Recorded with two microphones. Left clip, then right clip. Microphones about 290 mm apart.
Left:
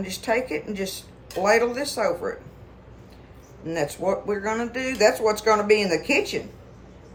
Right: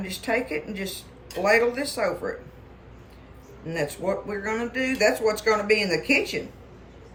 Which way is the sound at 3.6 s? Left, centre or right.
Centre.